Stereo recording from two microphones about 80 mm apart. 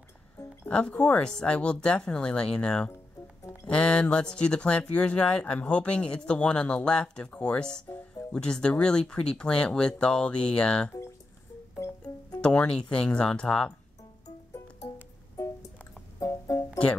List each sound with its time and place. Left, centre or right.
0.7 s speech: centre
12.4 s speech: centre
16.2 s music: left